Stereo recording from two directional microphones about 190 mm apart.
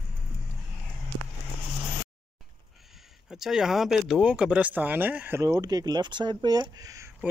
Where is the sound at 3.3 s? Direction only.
5° right (ahead or behind).